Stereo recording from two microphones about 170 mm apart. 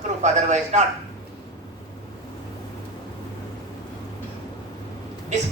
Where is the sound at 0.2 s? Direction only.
45° right (ahead or behind).